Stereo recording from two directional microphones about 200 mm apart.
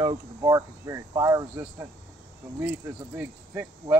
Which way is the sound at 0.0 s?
20° right (ahead or behind).